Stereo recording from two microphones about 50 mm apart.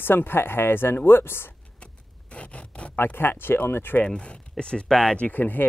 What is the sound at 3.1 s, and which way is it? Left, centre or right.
Speech, left.